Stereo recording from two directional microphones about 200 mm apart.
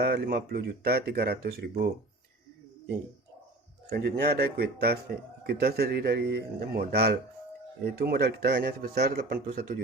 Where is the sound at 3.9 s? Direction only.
50° right (ahead or behind).